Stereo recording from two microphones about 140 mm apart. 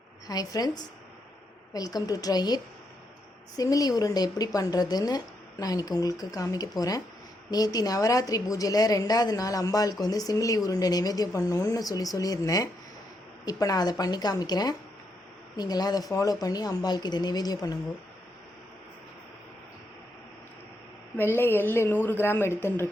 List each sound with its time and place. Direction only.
0.3 s speech: 25° left (ahead or behind)
3.6 s speech: 25° left (ahead or behind)
21.2 s speech: 15° left (ahead or behind)